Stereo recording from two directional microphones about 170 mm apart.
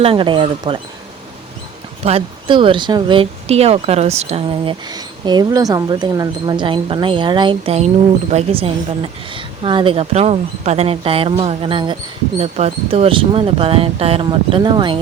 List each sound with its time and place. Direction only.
0.0 s speech: 30° right (ahead or behind)
2.0 s speech: 35° right (ahead or behind)